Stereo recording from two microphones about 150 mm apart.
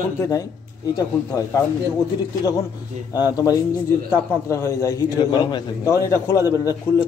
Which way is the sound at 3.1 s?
25° left (ahead or behind).